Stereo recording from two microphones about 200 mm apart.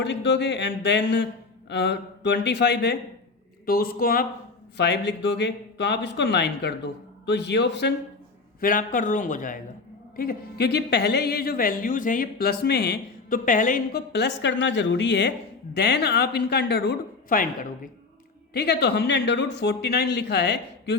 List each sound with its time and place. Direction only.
0.0 s speech: 60° left (ahead or behind)
4.8 s speech: 60° left (ahead or behind)
8.6 s speech: 45° left (ahead or behind)
14.1 s speech: 60° left (ahead or behind); by 17.7 s 45° left (ahead or behind)
18.5 s speech: 55° left (ahead or behind)